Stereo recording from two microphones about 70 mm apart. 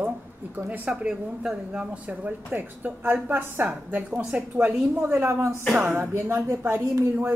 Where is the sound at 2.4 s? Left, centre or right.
Right.